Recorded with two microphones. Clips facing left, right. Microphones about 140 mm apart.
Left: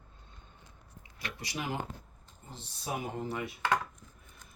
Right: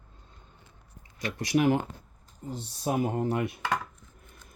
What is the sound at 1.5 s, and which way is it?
Speech, 60° right (ahead or behind).